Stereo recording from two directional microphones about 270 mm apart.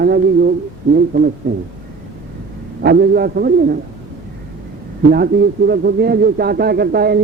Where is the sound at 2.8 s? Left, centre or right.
Right.